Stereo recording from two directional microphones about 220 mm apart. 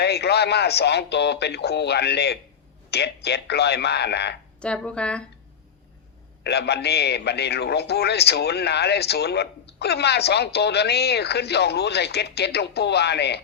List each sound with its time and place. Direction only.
0.0 s a man's voice: 50° left (ahead or behind)
4.6 s speech: 5° left (ahead or behind)
6.4 s a man's voice: 50° left (ahead or behind)